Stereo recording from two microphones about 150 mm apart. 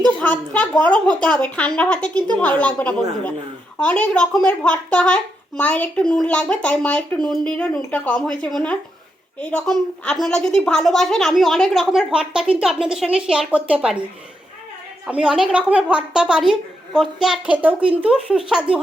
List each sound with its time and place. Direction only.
0.2 s a woman's voice: 10° left (ahead or behind); by 14.0 s 5° right (ahead or behind)
15.0 s a woman's voice: 5° right (ahead or behind)